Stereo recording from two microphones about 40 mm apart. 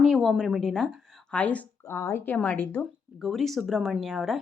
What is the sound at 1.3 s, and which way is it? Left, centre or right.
Speech, left.